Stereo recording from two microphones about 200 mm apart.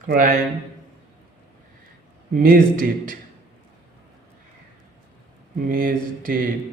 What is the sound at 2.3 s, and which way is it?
Speech, 45° right (ahead or behind).